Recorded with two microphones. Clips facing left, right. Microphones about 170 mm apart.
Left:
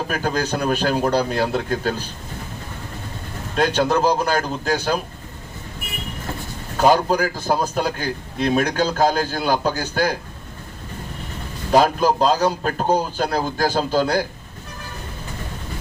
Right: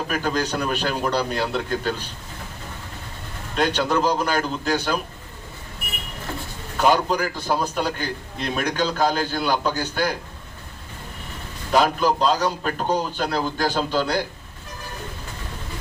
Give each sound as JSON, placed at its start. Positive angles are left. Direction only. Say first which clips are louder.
{"t": 0.1, "sound": "speech", "louder": "left 1 dB", "side_deg": 40}
{"t": 3.5, "sound": "a man's voice", "louder": "left 3 dB", "side_deg": 40}
{"t": 6.7, "sound": "a man's voice", "louder": "left 3 dB", "side_deg": 40}
{"t": 11.7, "sound": "a man's voice", "louder": "left 3 dB", "side_deg": 40}